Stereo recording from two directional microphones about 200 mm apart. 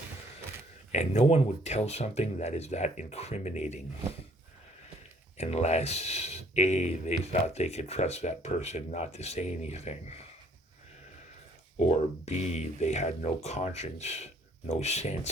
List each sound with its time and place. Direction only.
0.9 s speech: 35° left (ahead or behind)
5.4 s speech: 35° left (ahead or behind)
11.8 s speech: 35° left (ahead or behind)